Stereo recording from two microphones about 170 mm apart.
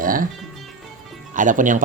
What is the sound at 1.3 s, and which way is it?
Speech, 50° right (ahead or behind).